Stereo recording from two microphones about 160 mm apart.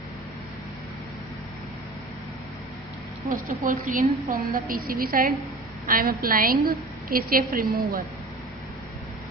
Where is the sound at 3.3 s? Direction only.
55° right (ahead or behind).